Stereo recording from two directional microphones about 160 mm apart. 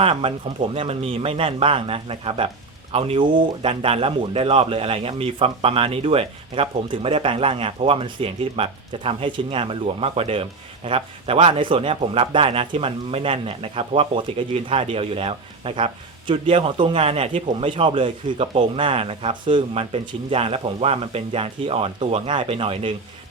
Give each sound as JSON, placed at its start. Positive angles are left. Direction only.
{"t": 0.0, "sound": "speech", "side_deg": -35}